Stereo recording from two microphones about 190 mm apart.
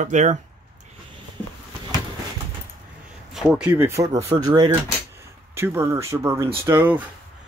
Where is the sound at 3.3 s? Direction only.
5° right (ahead or behind).